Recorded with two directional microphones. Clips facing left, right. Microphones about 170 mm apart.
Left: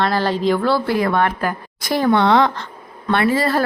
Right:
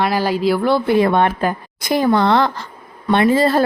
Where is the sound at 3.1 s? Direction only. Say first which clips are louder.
Right 3 dB; 20° right (ahead or behind).